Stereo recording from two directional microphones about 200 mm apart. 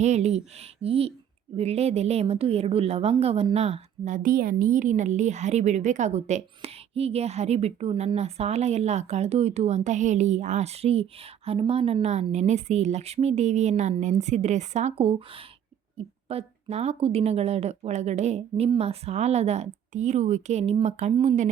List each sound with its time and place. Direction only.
0.0 s a woman's voice: 35° right (ahead or behind)